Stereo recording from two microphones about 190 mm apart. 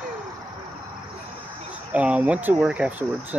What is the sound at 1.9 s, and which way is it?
Speech, 5° right (ahead or behind).